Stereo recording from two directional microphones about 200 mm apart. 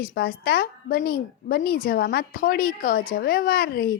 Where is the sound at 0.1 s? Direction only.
50° left (ahead or behind).